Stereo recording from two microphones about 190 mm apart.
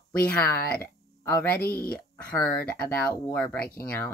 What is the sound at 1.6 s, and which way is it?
Speech, 50° left (ahead or behind).